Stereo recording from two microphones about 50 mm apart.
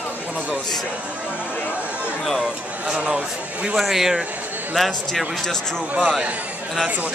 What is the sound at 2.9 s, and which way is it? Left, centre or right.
Speech, centre.